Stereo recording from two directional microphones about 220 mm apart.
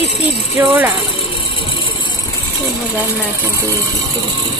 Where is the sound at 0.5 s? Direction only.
10° right (ahead or behind).